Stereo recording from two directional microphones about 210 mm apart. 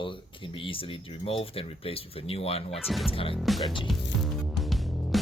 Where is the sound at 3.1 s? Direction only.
25° left (ahead or behind).